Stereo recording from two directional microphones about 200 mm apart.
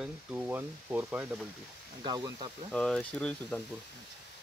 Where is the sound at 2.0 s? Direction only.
20° right (ahead or behind).